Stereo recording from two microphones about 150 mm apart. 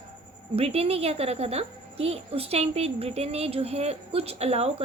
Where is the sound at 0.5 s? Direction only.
40° right (ahead or behind).